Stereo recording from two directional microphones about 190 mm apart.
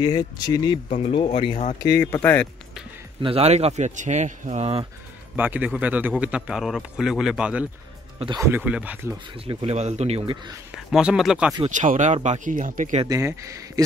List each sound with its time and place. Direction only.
0.0 s speech: 20° left (ahead or behind)
0.8 s speech: 45° left (ahead or behind)
1.1 s speech: 30° left (ahead or behind)
1.8 s speech: 15° left (ahead or behind)
3.2 s speech: 30° right (ahead or behind)
5.3 s a man's voice: 10° right (ahead or behind)
9.5 s speech: 30° right (ahead or behind)
10.9 s a man's voice: 5° right (ahead or behind)
11.7 s speech: 40° right (ahead or behind)
13.0 s speech: 15° right (ahead or behind)